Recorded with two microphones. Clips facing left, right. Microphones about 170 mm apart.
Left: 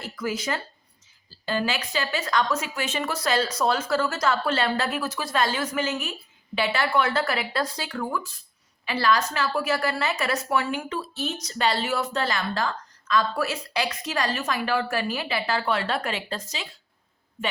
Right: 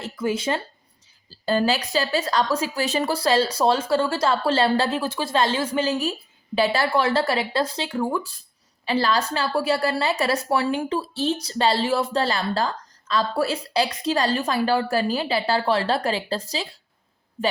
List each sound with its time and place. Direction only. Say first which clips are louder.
0.0 s a woman's voice: right 5 dB; 25° right (ahead or behind)